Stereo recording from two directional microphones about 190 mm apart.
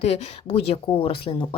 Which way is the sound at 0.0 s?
35° left (ahead or behind).